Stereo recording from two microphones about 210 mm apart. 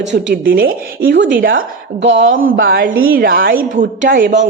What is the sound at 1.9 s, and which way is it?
Speech, 60° right (ahead or behind).